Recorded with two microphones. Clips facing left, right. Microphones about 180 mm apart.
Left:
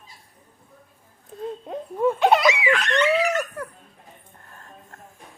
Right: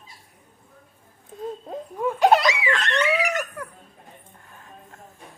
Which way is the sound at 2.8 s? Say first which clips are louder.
Left 2 dB; centre (ahead or behind).